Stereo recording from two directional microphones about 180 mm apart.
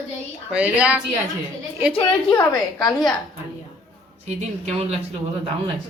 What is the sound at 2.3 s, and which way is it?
Speech, 20° left (ahead or behind).